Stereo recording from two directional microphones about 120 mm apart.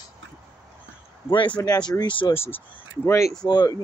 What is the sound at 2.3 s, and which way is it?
Speech, 20° left (ahead or behind).